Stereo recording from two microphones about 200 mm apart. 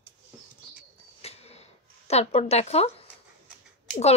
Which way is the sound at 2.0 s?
30° left (ahead or behind).